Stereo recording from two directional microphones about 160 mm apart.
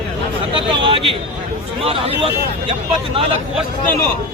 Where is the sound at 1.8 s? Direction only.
35° right (ahead or behind).